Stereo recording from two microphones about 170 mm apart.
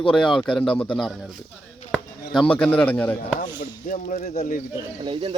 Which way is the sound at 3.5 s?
50° left (ahead or behind).